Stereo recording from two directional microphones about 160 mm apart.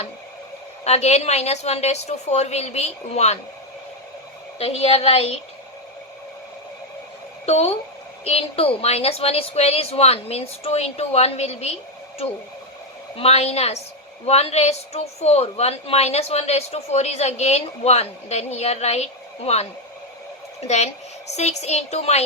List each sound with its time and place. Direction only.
0.9 s a woman's voice: 45° left (ahead or behind)
4.5 s a woman's voice: 40° left (ahead or behind)
7.4 s a woman's voice: 40° left (ahead or behind)
13.1 s a woman's voice: 40° left (ahead or behind)
20.7 s a woman's voice: 45° left (ahead or behind)